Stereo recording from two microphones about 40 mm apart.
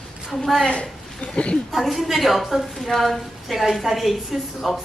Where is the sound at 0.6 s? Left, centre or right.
Left.